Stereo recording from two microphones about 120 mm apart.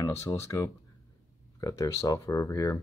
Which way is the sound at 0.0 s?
25° left (ahead or behind).